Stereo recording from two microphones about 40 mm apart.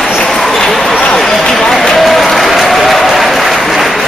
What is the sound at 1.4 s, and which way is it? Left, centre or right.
Run, centre.